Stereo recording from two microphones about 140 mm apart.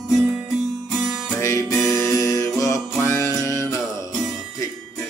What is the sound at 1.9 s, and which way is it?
Music, 20° left (ahead or behind).